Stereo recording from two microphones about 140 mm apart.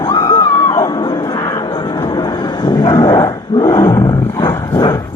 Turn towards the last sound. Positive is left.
turn(degrees=25)  # may be behind; listen again after turning